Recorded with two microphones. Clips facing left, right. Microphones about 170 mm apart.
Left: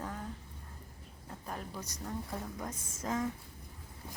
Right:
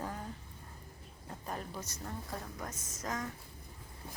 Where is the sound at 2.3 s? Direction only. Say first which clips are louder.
Left 2 dB; 10° left (ahead or behind).